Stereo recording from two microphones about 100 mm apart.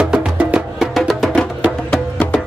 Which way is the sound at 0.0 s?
10° right (ahead or behind).